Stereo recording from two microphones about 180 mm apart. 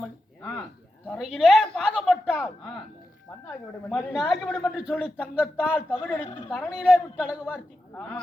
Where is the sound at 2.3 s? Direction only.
15° left (ahead or behind); by 5.4 s 5° right (ahead or behind).